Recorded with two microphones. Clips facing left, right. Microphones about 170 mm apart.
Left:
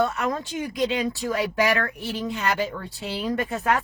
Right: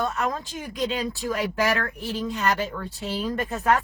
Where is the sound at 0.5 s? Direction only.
20° left (ahead or behind).